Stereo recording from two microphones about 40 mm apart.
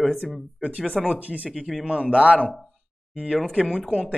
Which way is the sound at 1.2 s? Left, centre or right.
Right.